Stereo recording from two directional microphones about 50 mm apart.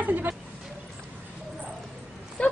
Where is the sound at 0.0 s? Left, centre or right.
Right.